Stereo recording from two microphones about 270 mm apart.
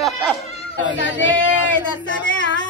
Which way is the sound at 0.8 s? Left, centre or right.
Left.